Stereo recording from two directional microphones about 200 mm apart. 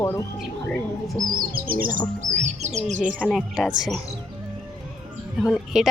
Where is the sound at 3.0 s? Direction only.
Centre (ahead or behind).